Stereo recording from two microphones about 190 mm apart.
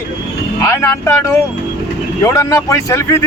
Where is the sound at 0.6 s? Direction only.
15° left (ahead or behind).